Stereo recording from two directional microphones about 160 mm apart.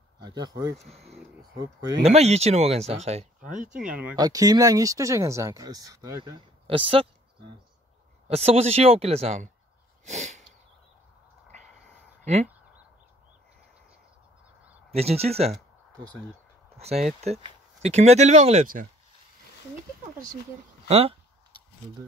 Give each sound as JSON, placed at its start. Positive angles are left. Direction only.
{"t": 0.2, "sound": "speech", "side_deg": -25}
{"t": 0.8, "sound": "speech", "side_deg": -40}
{"t": 1.4, "sound": "speech", "side_deg": -25}
{"t": 2.0, "sound": "speech", "side_deg": -40}
{"t": 3.3, "sound": "speech", "side_deg": -5}
{"t": 4.2, "sound": "speech", "side_deg": -25}
{"t": 6.7, "sound": "speech", "side_deg": -35}
{"t": 8.3, "sound": "speech", "side_deg": -40}
{"t": 10.0, "sound": "a sound", "side_deg": -45}
{"t": 12.3, "sound": "speech", "side_deg": -45}
{"t": 14.9, "sound": "speech", "side_deg": -40}
{"t": 16.7, "sound": "speech", "side_deg": -40}
{"t": 20.9, "sound": "speech", "side_deg": -35}